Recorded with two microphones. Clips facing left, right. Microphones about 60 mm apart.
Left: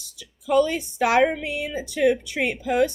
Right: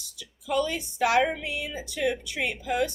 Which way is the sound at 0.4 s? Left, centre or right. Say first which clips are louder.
Left 7 dB; left.